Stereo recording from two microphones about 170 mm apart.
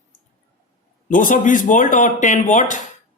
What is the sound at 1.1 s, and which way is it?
Speech, 50° left (ahead or behind).